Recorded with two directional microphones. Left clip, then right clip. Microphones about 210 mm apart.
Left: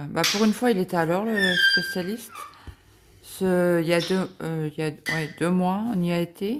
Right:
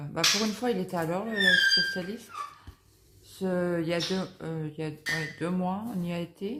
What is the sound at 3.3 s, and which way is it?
Speech, 50° left (ahead or behind).